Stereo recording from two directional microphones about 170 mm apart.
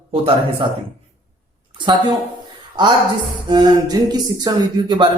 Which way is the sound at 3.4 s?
25° right (ahead or behind).